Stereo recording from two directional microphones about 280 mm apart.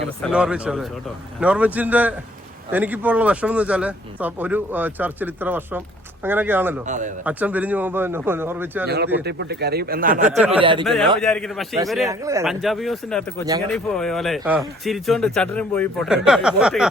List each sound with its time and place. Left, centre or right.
0.2 s speech: centre
6.8 s a man's voice: right
7.3 s speech: centre
9.2 s speech: right; by 10.8 s centre
10.8 s speech: centre
12.0 s speech: centre